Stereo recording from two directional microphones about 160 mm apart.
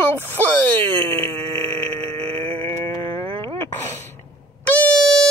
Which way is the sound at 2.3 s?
35° right (ahead or behind).